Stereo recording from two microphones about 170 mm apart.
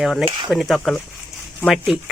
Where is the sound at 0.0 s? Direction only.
Centre (ahead or behind).